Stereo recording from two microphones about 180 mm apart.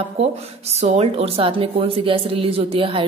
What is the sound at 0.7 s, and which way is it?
A woman's voice, 35° right (ahead or behind).